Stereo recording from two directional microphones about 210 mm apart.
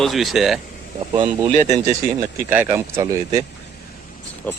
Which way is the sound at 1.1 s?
20° right (ahead or behind).